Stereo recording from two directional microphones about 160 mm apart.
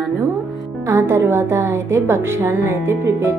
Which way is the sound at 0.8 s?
15° right (ahead or behind).